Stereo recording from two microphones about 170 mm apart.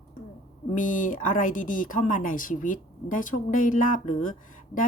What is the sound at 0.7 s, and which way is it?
Speech, 50° left (ahead or behind).